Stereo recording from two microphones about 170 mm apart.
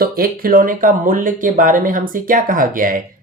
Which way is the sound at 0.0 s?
60° right (ahead or behind).